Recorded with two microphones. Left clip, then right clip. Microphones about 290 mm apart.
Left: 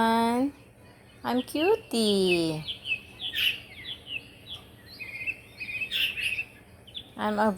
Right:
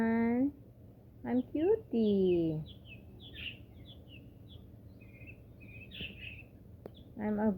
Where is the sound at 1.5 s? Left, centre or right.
Left.